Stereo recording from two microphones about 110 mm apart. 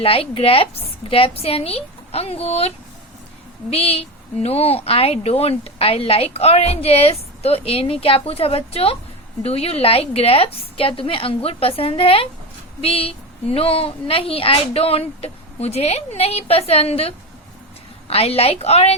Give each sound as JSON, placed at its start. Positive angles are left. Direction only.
{"t": 0.0, "sound": "a woman's voice", "side_deg": 60}